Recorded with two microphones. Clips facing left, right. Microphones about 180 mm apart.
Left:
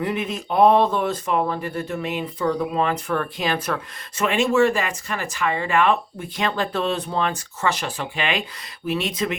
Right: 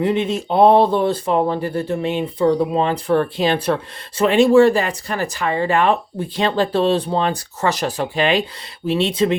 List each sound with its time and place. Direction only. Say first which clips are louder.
0.0 s speech: right 7 dB; 25° right (ahead or behind)